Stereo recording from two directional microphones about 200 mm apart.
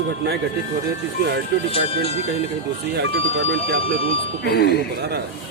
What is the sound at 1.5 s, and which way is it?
Speech, 60° right (ahead or behind).